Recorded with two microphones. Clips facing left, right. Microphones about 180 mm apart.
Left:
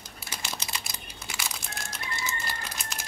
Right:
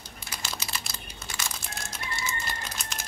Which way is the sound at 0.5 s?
15° left (ahead or behind).